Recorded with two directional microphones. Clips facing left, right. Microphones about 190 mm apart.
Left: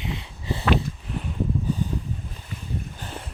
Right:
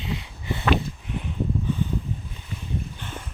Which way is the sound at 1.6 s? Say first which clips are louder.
Even; 40° left (ahead or behind).